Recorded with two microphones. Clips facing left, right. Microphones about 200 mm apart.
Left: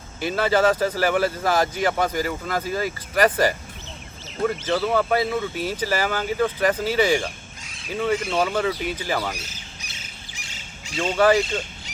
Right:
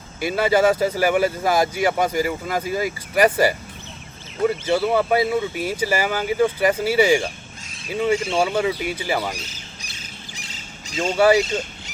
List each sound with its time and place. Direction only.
0.2 s speech: 10° right (ahead or behind)
10.3 s squawk: 35° right (ahead or behind)
11.2 s speech: 10° right (ahead or behind)